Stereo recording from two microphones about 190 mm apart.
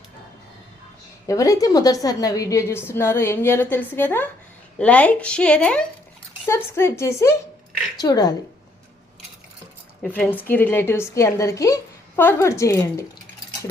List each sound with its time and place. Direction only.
1.3 s a woman's voice: 15° left (ahead or behind)
10.0 s a woman's voice: 10° left (ahead or behind)